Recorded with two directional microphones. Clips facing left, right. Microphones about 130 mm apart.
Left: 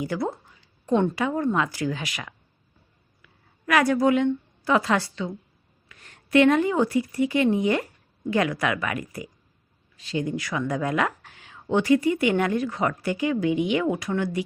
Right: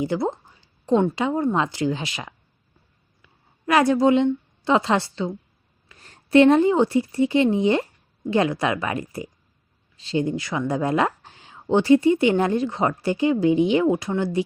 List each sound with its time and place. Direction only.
0.0 s a sound: 25° right (ahead or behind)
0.9 s speech: 20° right (ahead or behind)
3.7 s speech: 25° right (ahead or behind)